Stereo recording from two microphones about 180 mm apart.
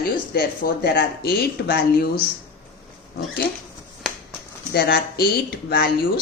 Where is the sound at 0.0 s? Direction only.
60° left (ahead or behind).